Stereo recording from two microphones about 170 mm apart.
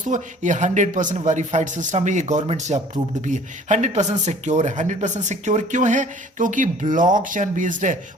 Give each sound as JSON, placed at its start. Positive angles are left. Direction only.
{"t": 0.1, "sound": "a man's voice", "side_deg": -45}